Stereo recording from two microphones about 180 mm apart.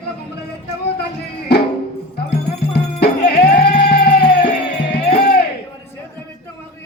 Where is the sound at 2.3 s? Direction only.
65° left (ahead or behind).